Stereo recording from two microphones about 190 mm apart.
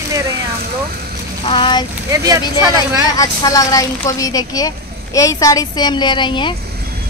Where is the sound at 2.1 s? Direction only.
15° right (ahead or behind).